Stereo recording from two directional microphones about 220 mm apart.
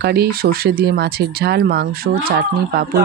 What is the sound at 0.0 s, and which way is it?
Speech, 45° right (ahead or behind).